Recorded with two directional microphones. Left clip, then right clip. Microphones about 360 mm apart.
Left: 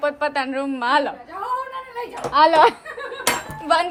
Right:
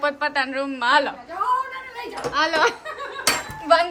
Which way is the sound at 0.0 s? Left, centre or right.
Centre.